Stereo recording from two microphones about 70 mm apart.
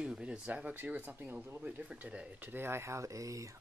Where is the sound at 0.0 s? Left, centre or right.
Centre.